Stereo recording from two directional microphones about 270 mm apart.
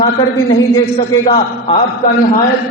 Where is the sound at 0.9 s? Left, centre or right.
Left.